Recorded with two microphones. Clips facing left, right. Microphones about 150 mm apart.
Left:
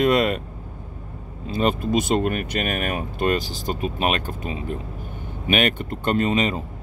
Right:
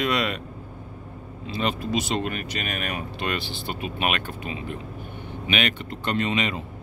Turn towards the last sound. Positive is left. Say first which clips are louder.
# left 4 dB
turn(degrees=40)  # may be behind; listen again after turning